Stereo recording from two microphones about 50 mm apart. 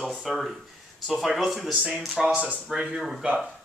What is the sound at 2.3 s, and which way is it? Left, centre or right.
Speech, right.